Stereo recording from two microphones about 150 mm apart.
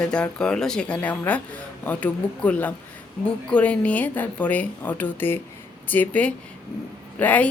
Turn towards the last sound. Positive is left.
turn(degrees=10)  # may be behind; listen again after turning